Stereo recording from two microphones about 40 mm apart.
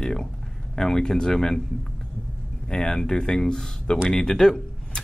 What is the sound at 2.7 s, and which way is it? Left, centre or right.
Speech, centre.